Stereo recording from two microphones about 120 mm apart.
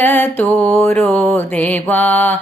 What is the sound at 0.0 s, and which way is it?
Mantra, 15° left (ahead or behind).